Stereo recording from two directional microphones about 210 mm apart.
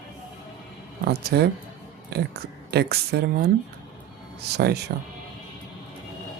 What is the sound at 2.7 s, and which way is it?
Speech, 50° right (ahead or behind).